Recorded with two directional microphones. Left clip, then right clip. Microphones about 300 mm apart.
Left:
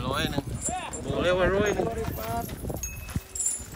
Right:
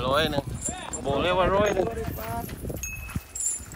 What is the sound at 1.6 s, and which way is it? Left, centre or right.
Speech, centre.